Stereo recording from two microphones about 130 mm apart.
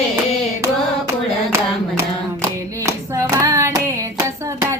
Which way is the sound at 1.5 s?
20° right (ahead or behind).